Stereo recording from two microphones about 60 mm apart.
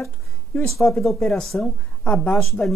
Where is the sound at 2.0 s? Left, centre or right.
Left.